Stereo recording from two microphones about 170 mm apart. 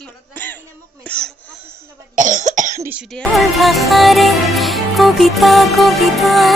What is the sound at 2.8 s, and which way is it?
Cough, 10° right (ahead or behind).